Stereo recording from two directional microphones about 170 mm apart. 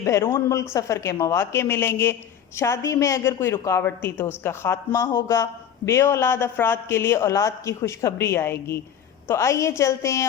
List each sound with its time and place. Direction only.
0.0 s a woman's voice: 15° left (ahead or behind)